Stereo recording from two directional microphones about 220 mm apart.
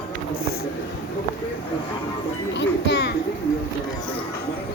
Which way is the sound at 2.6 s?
50° left (ahead or behind).